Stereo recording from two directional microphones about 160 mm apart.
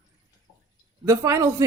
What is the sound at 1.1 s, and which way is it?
Speech, 20° right (ahead or behind).